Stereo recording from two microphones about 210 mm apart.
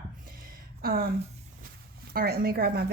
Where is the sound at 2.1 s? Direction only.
45° right (ahead or behind).